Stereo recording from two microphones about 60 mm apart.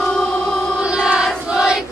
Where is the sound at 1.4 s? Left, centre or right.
Centre.